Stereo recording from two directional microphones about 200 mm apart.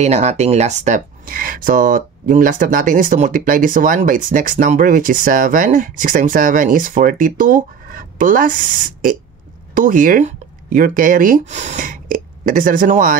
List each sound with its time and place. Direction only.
0.0 s speech: 35° right (ahead or behind)